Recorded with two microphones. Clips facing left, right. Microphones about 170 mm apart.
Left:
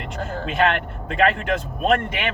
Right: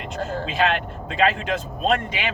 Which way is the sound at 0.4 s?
55° left (ahead or behind).